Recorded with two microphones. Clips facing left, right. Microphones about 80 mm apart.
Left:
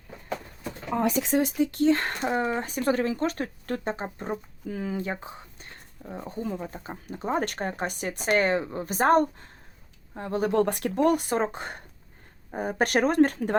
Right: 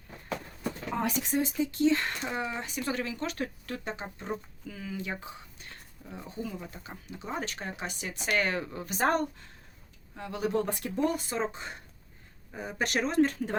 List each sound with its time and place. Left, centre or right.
1.2 s speech: left
8.8 s speech: left
10.5 s speech: left